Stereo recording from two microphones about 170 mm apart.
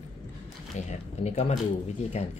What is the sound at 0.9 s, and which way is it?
Speech, 40° left (ahead or behind).